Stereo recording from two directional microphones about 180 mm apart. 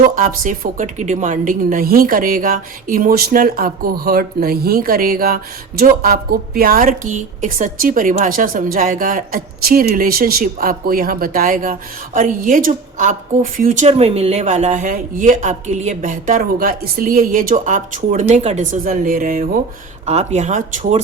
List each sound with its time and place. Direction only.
0.0 s a woman's voice: 50° right (ahead or behind)
13.8 s a woman's voice: 35° right (ahead or behind); by 19.5 s 50° right (ahead or behind)
20.1 s speech: 40° right (ahead or behind)